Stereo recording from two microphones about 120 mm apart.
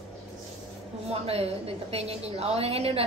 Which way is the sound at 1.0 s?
55° right (ahead or behind).